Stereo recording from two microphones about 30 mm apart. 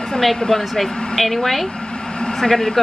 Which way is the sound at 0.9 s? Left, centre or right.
Left.